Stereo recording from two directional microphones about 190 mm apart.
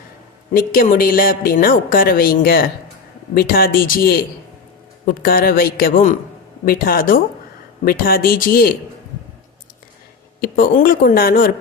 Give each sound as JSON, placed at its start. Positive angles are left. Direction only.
{"t": 0.5, "sound": "speech", "side_deg": 50}
{"t": 10.4, "sound": "speech", "side_deg": 50}